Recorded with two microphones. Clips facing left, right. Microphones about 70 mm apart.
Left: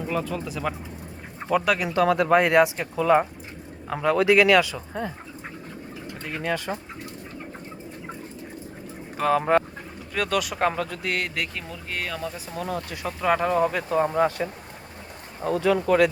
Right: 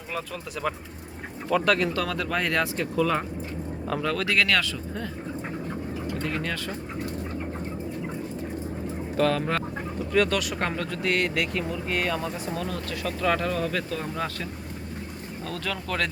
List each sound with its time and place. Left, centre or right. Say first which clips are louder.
0.1 s speech: left 3 dB; centre
1.9 s speech: left 8 dB; left
6.2 s speech: left 6 dB; centre
9.1 s speech: left 4 dB; centre
10.1 s speech: right 2 dB; centre
12.5 s speech: left 1 dB; centre